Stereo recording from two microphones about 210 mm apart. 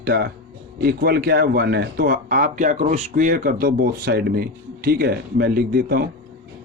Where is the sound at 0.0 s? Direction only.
45° right (ahead or behind).